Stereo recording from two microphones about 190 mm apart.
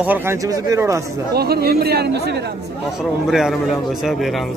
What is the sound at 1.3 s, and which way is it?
Speech, 55° right (ahead or behind).